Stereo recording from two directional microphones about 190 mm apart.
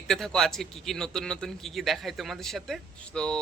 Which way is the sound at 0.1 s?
Centre (ahead or behind).